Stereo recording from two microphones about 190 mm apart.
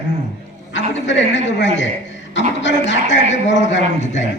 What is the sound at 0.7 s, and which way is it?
A woman's voice, 70° left (ahead or behind).